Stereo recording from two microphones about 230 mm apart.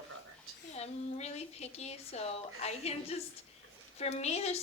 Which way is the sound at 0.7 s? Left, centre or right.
Left.